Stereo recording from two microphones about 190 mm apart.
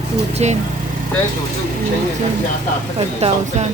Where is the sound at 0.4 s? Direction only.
35° right (ahead or behind).